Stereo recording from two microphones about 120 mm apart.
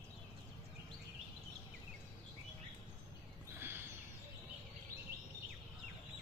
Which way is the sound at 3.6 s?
20° right (ahead or behind).